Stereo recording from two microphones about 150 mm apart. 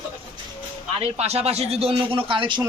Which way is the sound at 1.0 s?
45° right (ahead or behind).